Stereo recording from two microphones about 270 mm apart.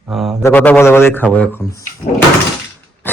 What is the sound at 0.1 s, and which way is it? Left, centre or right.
Speech, centre.